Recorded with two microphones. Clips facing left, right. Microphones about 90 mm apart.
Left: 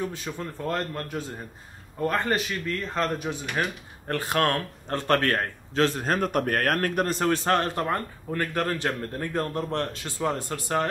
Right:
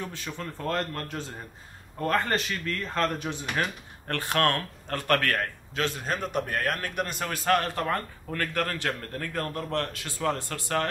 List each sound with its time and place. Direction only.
0.0 s a man's voice: 15° left (ahead or behind)